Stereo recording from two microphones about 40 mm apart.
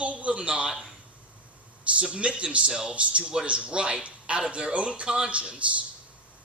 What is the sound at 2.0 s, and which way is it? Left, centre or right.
Speech, right.